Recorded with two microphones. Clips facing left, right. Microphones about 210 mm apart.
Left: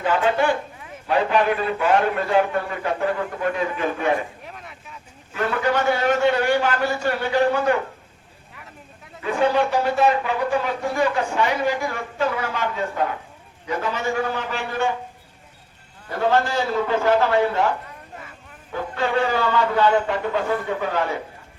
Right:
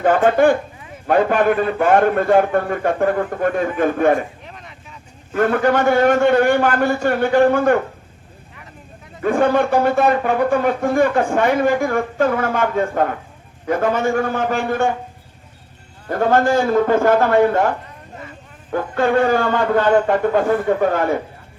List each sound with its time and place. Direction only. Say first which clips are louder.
0.0 s speech: right 7 dB; 50° right (ahead or behind)
4.4 s vehicle: right 1 dB; 5° left (ahead or behind)
5.3 s speech: right 6 dB; 50° right (ahead or behind)
9.2 s speech: right 4 dB; 50° right (ahead or behind)
16.0 s speech: right 5 dB; 50° right (ahead or behind)